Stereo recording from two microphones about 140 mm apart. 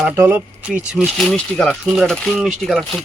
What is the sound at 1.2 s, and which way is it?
Speech, 5° left (ahead or behind).